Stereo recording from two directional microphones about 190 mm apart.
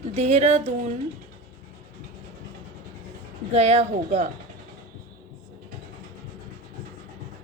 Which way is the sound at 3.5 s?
35° right (ahead or behind).